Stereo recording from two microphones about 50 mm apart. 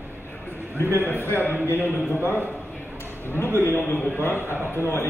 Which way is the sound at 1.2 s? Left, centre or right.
Right.